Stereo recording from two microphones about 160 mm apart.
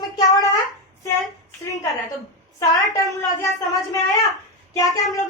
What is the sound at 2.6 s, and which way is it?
A woman's voice, 20° left (ahead or behind).